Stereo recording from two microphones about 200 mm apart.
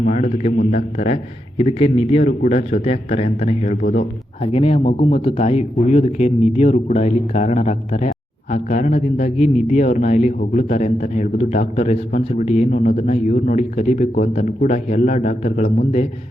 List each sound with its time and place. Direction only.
0.0 s a man's voice: 35° left (ahead or behind)